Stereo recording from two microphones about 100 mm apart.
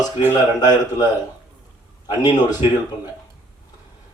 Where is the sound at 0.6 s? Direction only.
40° left (ahead or behind).